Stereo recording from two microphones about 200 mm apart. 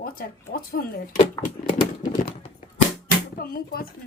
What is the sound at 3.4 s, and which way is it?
Speech, 50° left (ahead or behind).